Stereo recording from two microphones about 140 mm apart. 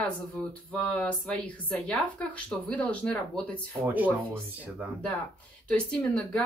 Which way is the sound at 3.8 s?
10° right (ahead or behind).